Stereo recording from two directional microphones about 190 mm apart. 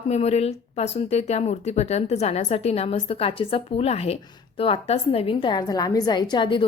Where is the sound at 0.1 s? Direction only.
35° left (ahead or behind).